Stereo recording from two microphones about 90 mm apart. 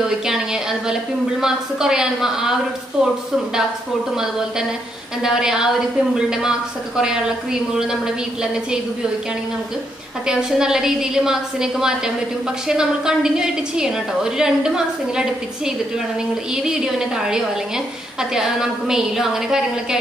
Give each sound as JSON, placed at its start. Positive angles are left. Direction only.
{"t": 0.3, "sound": "a woman's voice", "side_deg": -5}
{"t": 5.2, "sound": "a woman's voice", "side_deg": -5}
{"t": 10.2, "sound": "a woman's voice", "side_deg": -5}